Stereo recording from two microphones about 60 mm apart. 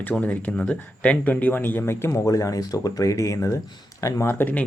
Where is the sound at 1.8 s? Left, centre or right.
Left.